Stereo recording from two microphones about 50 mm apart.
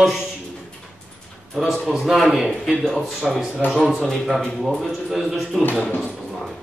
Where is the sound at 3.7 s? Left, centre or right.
Centre.